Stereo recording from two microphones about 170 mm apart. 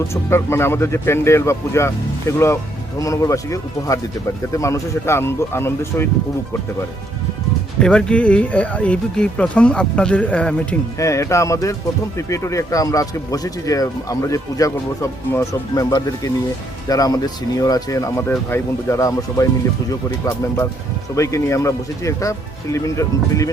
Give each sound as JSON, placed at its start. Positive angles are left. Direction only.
{"t": 0.1, "sound": "speech", "side_deg": 15}
{"t": 7.8, "sound": "speech", "side_deg": 5}
{"t": 11.0, "sound": "speech", "side_deg": 20}
{"t": 21.2, "sound": "speech", "side_deg": 15}